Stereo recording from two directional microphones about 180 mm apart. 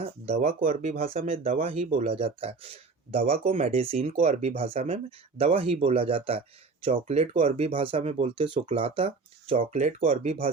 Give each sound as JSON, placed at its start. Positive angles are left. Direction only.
{"t": 0.0, "sound": "speech", "side_deg": -35}